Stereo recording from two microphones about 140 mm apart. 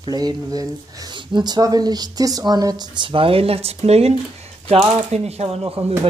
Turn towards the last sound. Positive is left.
turn(degrees=-50)  # may be behind; listen again after turning